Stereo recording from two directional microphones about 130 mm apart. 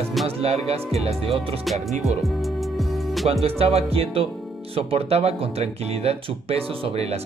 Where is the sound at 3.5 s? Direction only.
50° right (ahead or behind).